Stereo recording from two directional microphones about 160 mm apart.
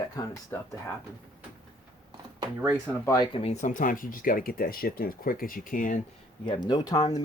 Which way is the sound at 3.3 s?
40° left (ahead or behind).